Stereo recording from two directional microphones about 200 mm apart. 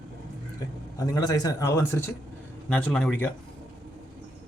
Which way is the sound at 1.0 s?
20° left (ahead or behind).